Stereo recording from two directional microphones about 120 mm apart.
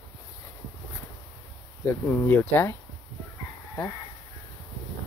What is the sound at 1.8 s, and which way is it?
Speech, 15° left (ahead or behind).